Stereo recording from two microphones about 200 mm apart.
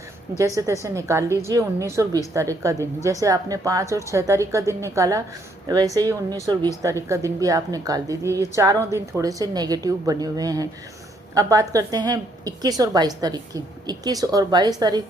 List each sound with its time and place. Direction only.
0.3 s a woman's voice: 15° right (ahead or behind)